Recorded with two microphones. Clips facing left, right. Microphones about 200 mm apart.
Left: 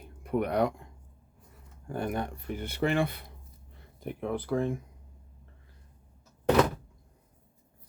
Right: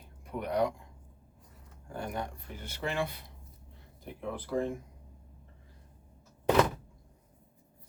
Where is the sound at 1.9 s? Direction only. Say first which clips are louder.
Left 5 dB; 60° left (ahead or behind).